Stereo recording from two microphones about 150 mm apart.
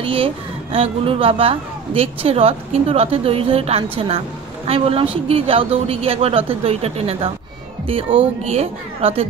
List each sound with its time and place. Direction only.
0.0 s speech: 35° right (ahead or behind)
8.5 s speech: 40° right (ahead or behind)